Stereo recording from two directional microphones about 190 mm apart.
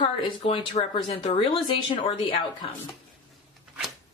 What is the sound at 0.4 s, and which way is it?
Speech, 35° left (ahead or behind).